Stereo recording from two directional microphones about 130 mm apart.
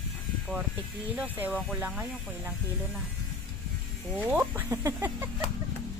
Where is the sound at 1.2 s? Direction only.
10° right (ahead or behind).